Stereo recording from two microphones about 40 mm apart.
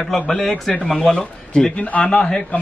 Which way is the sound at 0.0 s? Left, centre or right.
Centre.